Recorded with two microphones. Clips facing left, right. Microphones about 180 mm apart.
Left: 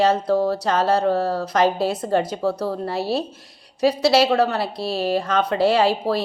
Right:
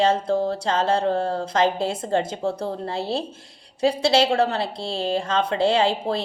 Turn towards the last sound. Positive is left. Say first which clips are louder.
# left 2 dB
turn(degrees=-25)  # may be behind; listen again after turning